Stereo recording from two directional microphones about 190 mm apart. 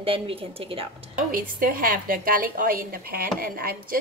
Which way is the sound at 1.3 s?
50° right (ahead or behind).